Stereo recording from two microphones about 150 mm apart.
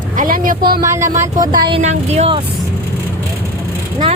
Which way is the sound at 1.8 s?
45° right (ahead or behind).